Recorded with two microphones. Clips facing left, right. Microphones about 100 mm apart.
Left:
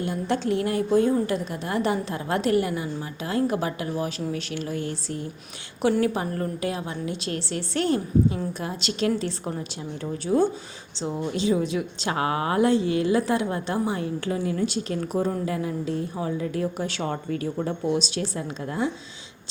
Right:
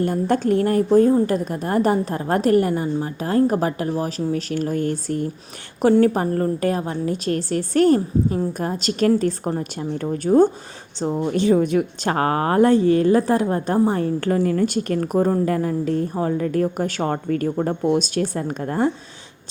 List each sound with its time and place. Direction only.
0.0 s a woman's voice: 45° right (ahead or behind)